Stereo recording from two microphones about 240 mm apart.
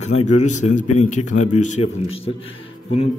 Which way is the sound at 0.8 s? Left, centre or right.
Left.